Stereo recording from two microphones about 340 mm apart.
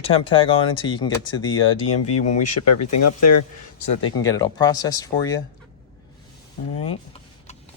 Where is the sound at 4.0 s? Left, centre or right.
Centre.